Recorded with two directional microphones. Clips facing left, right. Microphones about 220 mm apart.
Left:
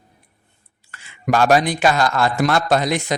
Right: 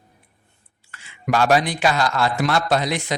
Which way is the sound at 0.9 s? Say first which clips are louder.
Left 3 dB; 45° left (ahead or behind).